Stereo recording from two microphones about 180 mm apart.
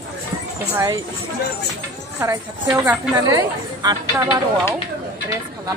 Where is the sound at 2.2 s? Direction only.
15° right (ahead or behind).